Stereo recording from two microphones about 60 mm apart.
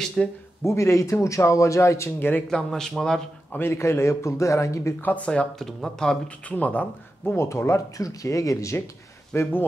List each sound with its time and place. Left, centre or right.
0.2 s speech: centre
0.7 s a man's voice: left
2.1 s speech: left
2.5 s speech: centre
3.5 s a man's voice: left
5.0 s speech: left
5.6 s speech: centre
6.5 s speech: left
7.3 s speech: left
8.0 s a man's voice: left
9.3 s speech: left